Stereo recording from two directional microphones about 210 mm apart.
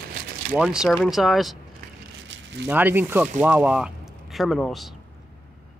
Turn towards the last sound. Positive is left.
turn(degrees=0)  # may be behind; listen again after turning